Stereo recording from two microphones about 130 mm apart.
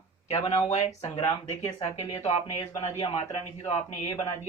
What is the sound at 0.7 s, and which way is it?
Speech, 55° left (ahead or behind).